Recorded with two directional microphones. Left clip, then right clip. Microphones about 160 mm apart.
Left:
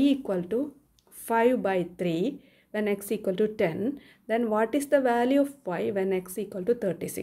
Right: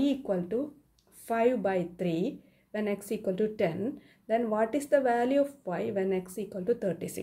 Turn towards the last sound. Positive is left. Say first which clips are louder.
# left 3 dB
turn(degrees=30)  # may be behind; listen again after turning